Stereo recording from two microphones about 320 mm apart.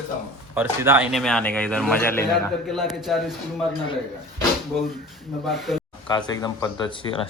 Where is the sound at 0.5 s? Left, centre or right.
Centre.